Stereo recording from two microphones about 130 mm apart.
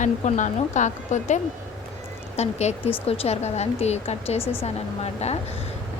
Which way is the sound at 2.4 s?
55° left (ahead or behind).